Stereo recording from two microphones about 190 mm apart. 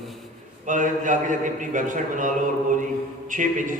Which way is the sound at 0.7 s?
40° right (ahead or behind).